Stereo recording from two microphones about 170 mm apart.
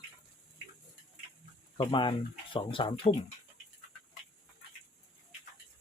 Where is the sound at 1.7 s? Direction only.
30° left (ahead or behind).